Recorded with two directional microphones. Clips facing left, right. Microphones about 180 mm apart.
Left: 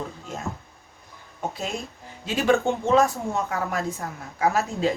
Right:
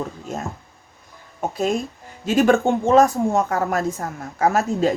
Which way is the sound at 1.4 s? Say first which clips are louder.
Right 8 dB; 40° right (ahead or behind).